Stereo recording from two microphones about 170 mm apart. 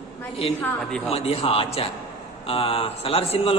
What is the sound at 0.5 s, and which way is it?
Speech, 5° left (ahead or behind).